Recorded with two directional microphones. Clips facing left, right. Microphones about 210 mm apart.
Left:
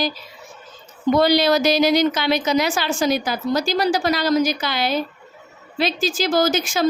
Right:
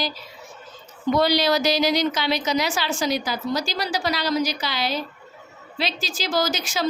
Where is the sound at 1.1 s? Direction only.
50° left (ahead or behind).